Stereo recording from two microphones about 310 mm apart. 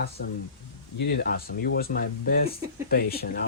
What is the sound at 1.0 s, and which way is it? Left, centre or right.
Speech, left.